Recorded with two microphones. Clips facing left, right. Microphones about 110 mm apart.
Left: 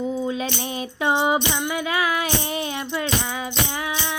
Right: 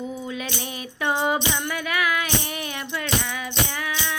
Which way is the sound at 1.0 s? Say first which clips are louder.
Left 3 dB; 20° left (ahead or behind).